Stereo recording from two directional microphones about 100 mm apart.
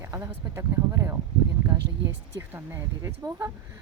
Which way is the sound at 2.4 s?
25° right (ahead or behind).